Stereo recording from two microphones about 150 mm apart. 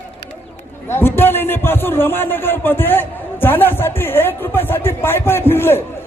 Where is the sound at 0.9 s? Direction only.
15° left (ahead or behind).